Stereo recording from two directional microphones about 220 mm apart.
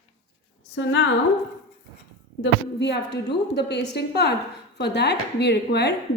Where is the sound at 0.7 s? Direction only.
55° left (ahead or behind).